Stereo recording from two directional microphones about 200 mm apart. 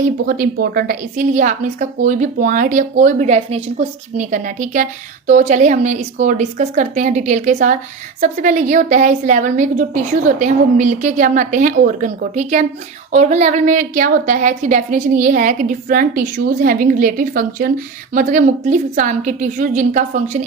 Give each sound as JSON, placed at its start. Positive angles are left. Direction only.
{"t": 0.0, "sound": "a woman's voice", "side_deg": -45}